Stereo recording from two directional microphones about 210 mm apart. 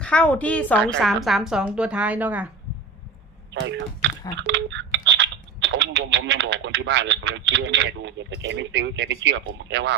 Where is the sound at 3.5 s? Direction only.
60° right (ahead or behind).